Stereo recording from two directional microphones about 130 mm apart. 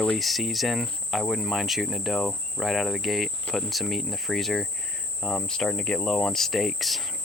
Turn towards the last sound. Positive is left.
turn(degrees=0)  # may be behind; listen again after turning